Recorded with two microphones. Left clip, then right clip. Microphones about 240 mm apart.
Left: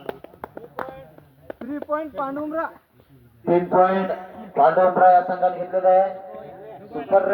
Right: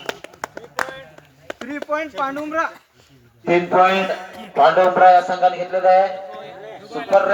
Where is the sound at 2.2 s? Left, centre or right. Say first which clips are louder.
Right 4 dB; right.